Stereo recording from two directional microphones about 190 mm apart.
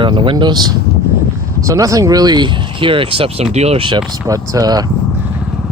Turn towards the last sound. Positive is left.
turn(degrees=-20)  # may be behind; listen again after turning